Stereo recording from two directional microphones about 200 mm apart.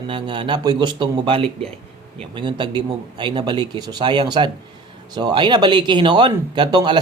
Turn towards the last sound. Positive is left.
turn(degrees=-20)  # may be behind; listen again after turning